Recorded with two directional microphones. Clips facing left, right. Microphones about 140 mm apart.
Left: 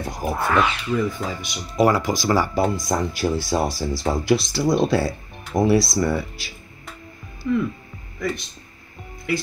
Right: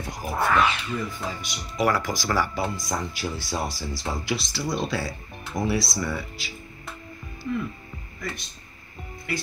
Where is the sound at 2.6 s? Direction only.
45° left (ahead or behind).